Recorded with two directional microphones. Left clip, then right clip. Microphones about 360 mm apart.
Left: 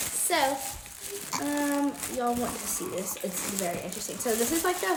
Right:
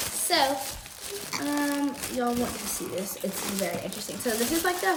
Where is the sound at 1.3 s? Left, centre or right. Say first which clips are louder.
Even; centre.